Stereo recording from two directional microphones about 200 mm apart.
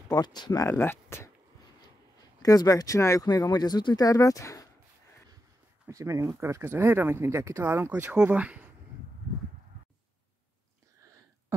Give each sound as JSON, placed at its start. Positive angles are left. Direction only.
{"t": 0.1, "sound": "speech", "side_deg": 20}
{"t": 5.9, "sound": "speech", "side_deg": -15}